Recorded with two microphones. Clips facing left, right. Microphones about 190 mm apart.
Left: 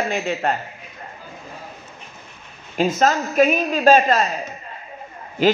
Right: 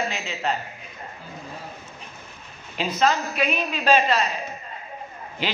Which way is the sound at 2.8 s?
45° left (ahead or behind).